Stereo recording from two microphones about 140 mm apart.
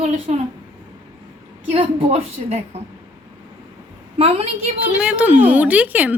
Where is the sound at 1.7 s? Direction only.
50° right (ahead or behind).